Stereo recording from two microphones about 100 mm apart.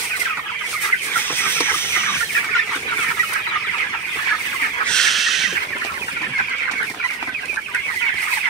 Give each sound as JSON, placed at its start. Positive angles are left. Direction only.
{"t": 1.4, "sound": "chicken", "side_deg": 25}
{"t": 4.8, "sound": "bird", "side_deg": 5}